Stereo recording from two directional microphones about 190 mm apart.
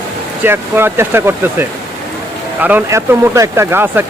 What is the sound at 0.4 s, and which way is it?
Speech, 10° right (ahead or behind).